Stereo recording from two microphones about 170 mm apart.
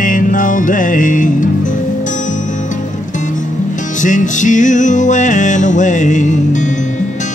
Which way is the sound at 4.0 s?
45° left (ahead or behind).